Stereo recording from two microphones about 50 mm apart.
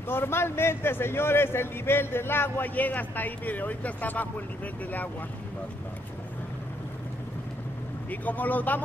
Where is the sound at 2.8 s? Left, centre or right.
Left.